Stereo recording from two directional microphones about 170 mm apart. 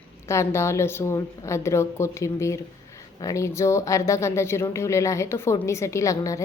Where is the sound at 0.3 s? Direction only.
15° left (ahead or behind).